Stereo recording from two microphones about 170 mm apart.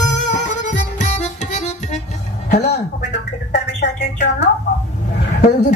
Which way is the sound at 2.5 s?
75° left (ahead or behind).